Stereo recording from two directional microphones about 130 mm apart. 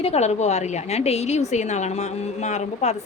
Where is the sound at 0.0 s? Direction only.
55° left (ahead or behind).